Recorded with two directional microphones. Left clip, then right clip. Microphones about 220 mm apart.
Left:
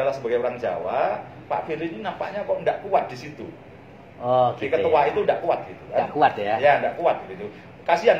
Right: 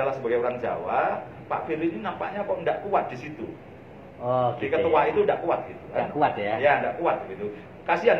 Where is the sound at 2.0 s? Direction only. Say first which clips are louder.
Left 2 dB; 15° left (ahead or behind).